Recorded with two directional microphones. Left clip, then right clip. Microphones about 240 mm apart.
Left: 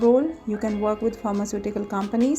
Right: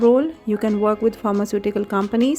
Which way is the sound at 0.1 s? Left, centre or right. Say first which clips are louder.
Right 3 dB; right.